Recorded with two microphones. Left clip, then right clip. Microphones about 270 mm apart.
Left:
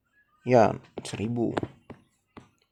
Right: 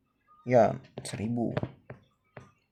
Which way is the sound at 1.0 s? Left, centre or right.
Left.